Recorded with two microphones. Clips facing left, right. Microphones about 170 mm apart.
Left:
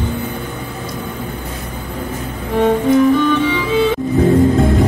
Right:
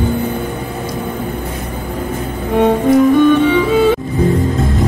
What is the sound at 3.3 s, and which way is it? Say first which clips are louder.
Music: right 4 dB; 50° right (ahead or behind).